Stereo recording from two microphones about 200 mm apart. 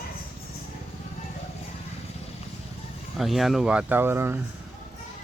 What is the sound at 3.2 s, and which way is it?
Speech, centre (ahead or behind).